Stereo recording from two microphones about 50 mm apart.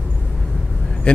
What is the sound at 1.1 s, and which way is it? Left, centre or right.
Speech, centre.